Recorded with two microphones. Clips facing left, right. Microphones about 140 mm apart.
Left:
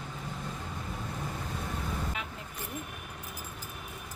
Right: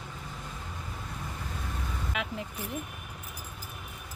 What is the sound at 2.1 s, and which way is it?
Vehicle, 90° right.